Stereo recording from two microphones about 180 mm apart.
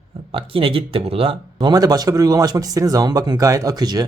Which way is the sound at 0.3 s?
30° right (ahead or behind).